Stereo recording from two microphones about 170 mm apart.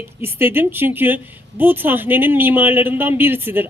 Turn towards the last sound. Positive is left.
turn(degrees=-15)  # may be behind; listen again after turning